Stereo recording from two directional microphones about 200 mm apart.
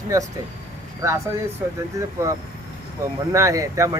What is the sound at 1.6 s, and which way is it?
Speech, 15° right (ahead or behind).